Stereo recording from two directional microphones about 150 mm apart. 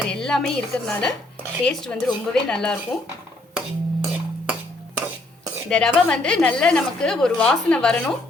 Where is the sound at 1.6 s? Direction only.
5° left (ahead or behind).